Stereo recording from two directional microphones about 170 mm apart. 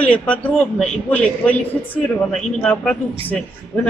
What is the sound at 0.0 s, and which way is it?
Speech, 10° left (ahead or behind).